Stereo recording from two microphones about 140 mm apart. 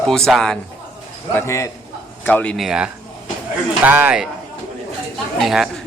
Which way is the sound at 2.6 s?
5° right (ahead or behind).